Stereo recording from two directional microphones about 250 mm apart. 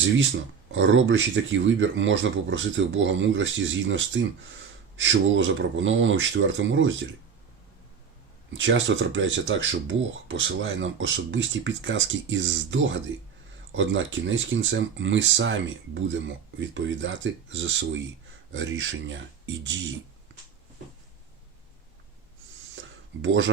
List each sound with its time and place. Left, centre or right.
0.7 s speech: right
8.5 s speech: right
23.2 s speech: right